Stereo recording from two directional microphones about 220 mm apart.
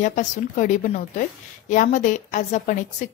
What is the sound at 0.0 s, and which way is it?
Speech, 35° left (ahead or behind).